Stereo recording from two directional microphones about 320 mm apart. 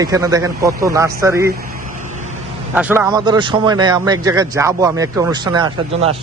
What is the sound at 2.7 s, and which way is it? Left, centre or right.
A man's voice, centre.